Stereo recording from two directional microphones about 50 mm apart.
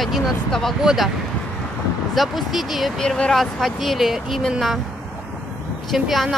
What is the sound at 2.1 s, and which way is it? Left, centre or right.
Speech, centre.